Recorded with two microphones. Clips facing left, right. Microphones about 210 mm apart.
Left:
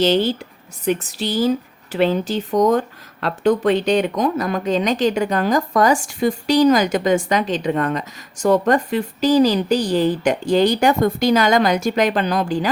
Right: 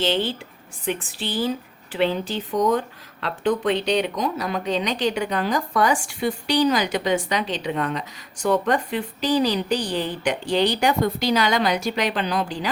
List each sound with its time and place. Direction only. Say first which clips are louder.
0.0 s a woman's voice: left 6 dB; 40° left (ahead or behind)